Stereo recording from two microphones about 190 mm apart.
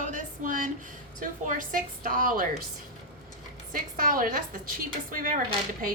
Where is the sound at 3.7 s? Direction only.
50° right (ahead or behind).